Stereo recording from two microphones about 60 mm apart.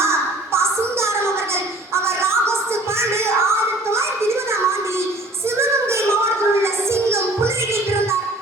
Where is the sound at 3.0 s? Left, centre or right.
Right.